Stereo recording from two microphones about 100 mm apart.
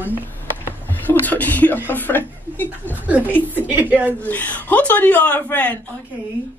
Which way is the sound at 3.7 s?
20° right (ahead or behind).